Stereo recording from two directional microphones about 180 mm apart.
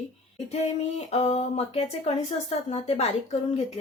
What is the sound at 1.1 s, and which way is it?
Speech, 35° left (ahead or behind).